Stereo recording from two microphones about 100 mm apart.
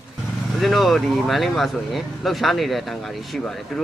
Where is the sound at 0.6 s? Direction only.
Centre (ahead or behind).